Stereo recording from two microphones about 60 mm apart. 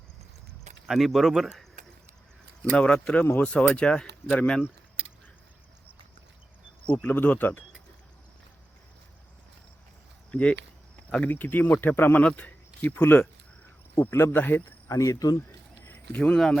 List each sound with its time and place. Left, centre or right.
0.9 s speech: centre
2.7 s speech: centre
3.2 s speech: left
3.4 s speech: centre
6.9 s speech: left
10.3 s speech: left
14.8 s speech: left
16.1 s speech: left